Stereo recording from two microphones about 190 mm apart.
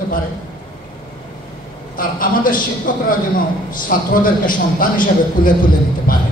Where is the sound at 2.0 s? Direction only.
50° left (ahead or behind).